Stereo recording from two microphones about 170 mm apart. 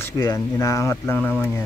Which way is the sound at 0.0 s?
20° left (ahead or behind).